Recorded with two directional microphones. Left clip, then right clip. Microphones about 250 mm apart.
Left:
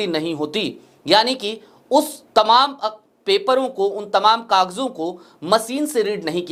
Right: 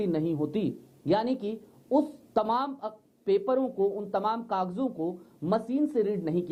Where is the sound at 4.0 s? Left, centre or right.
Centre.